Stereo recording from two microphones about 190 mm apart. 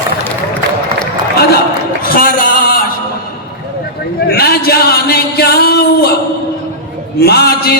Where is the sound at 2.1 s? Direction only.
50° left (ahead or behind).